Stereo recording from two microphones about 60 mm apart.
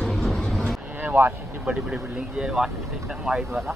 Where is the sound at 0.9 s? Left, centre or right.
Right.